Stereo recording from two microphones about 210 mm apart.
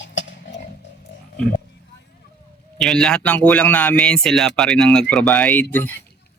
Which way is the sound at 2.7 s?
Centre (ahead or behind).